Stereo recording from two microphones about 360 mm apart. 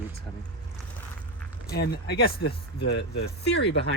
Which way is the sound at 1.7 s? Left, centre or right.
Left.